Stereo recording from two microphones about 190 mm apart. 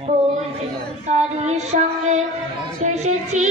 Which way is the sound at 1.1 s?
35° right (ahead or behind).